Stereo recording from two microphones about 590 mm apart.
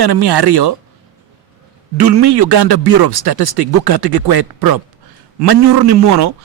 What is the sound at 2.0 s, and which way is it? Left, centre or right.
A man's voice, right.